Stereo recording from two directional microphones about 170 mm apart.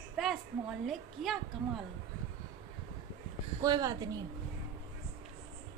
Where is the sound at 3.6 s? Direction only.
20° right (ahead or behind).